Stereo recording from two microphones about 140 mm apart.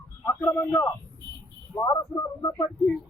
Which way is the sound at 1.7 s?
25° left (ahead or behind).